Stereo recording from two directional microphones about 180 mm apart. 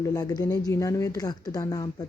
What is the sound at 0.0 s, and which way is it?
Speech, 20° left (ahead or behind).